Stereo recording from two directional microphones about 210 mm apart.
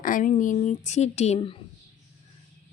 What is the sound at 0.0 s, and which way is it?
Speech, 40° left (ahead or behind).